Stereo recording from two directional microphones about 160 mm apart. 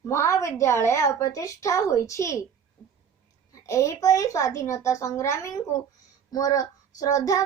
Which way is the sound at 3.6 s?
20° left (ahead or behind).